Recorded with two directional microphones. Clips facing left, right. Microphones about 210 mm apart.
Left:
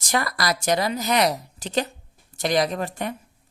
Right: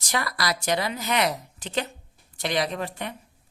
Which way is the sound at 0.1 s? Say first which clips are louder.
Left 3 dB; 45° left (ahead or behind).